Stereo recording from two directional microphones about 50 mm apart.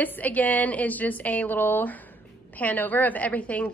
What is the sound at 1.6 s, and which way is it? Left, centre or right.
A woman's voice, left.